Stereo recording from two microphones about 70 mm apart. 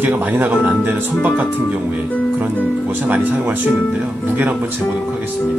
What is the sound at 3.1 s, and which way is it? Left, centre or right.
Speech, right.